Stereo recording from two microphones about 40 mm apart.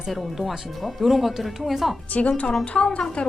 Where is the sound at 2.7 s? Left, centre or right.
Left.